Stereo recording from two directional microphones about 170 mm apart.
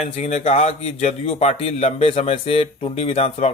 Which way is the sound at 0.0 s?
40° left (ahead or behind).